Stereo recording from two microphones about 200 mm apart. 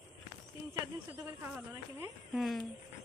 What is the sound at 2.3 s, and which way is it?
Speech, centre (ahead or behind).